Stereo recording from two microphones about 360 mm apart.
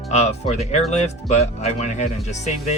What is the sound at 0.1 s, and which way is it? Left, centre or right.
Speech, centre.